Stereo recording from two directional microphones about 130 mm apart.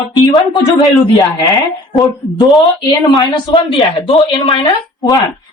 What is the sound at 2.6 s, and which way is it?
A woman's voice, 35° left (ahead or behind).